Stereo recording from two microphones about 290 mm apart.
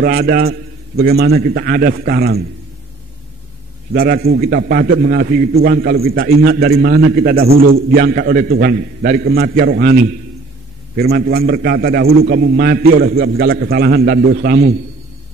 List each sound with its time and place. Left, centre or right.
0.0 s a man's voice: right
3.9 s a man's voice: right